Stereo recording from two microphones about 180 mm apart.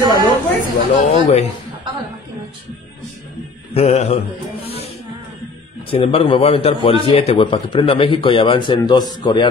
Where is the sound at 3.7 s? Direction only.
35° left (ahead or behind).